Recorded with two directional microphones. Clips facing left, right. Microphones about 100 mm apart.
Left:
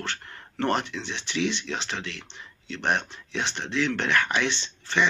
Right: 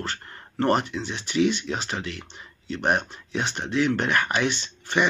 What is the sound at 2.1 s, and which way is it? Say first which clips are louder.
Speech: right 3 dB; 45° right (ahead or behind).